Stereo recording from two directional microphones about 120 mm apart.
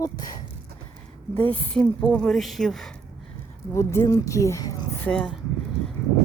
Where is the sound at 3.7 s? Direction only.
25° left (ahead or behind).